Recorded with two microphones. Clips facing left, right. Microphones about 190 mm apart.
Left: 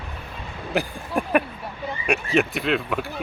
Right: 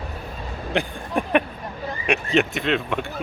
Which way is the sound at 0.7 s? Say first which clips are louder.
Even; centre (ahead or behind).